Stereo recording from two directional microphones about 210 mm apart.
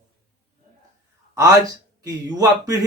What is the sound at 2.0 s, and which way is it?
Speech, 15° right (ahead or behind).